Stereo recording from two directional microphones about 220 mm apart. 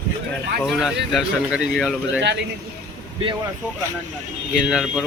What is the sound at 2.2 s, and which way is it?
Speech, 50° right (ahead or behind).